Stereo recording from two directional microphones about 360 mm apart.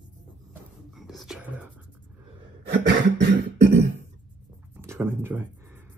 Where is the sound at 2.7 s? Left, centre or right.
Right.